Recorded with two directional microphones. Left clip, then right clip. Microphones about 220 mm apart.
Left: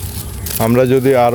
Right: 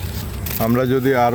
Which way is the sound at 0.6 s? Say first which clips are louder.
Left 6 dB; 40° left (ahead or behind).